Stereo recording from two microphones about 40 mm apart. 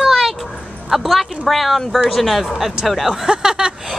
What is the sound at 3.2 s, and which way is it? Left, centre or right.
Speech, centre.